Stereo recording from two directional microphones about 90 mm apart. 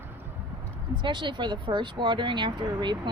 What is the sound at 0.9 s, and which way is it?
Speech, 60° right (ahead or behind).